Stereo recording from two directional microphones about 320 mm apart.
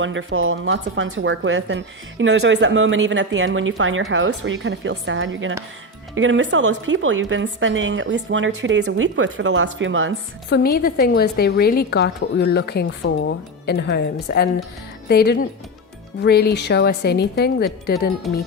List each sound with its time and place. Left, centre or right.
0.0 s speech: right
10.5 s a woman's voice: left